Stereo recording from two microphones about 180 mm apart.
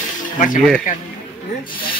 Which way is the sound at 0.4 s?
45° left (ahead or behind).